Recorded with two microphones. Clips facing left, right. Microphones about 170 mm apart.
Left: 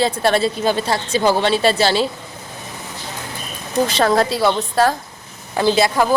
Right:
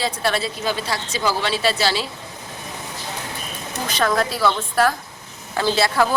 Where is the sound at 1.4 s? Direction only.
25° left (ahead or behind).